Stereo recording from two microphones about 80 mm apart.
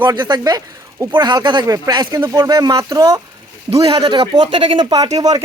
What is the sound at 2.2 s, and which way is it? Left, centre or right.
Speech, right.